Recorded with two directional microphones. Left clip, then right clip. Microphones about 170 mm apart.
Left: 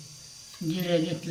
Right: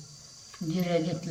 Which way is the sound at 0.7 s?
15° right (ahead or behind).